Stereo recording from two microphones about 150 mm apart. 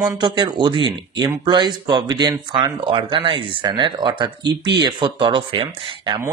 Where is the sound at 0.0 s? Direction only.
30° right (ahead or behind).